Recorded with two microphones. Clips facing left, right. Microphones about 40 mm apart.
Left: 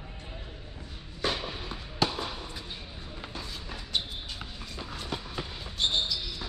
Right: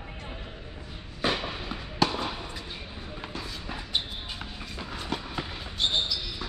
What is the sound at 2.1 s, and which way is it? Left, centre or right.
Fireworks, right.